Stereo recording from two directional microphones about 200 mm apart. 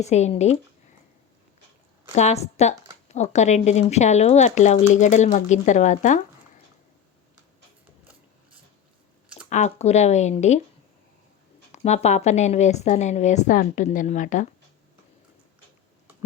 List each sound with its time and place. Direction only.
0.0 s speech: 35° left (ahead or behind)
2.1 s speech: 35° left (ahead or behind)
9.5 s speech: 35° left (ahead or behind)
11.7 s speech: 35° left (ahead or behind)